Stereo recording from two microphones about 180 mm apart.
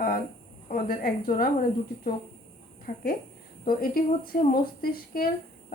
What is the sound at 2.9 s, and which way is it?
Speech, 50° left (ahead or behind).